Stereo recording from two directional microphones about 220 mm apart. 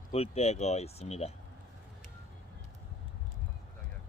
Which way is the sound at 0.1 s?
30° left (ahead or behind).